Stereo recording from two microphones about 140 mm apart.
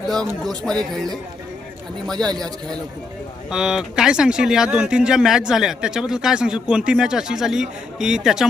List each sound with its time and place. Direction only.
0.1 s speech: centre (ahead or behind)
3.5 s speech: 5° right (ahead or behind)